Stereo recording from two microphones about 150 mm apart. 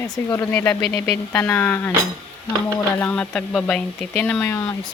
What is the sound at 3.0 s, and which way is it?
Speech, 10° left (ahead or behind).